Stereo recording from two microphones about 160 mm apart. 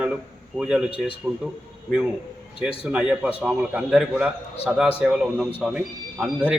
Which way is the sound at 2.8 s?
5° right (ahead or behind).